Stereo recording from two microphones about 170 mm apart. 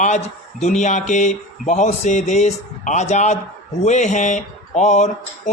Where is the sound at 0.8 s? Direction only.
45° left (ahead or behind).